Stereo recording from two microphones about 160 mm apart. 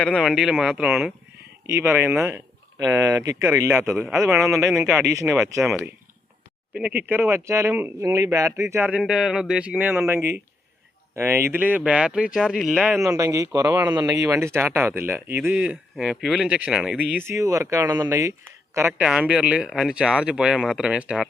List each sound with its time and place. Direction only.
0.0 s speech: 5° left (ahead or behind)
0.3 s speech: 5° right (ahead or behind)
1.6 s speech: 15° right (ahead or behind)
4.0 s speech: 5° right (ahead or behind)
6.7 s speech: 10° right (ahead or behind)
13.1 s speech: 20° right (ahead or behind)
19.0 s speech: 5° right (ahead or behind)